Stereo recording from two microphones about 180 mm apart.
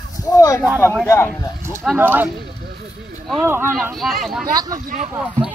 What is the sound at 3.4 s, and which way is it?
Speech, 10° right (ahead or behind).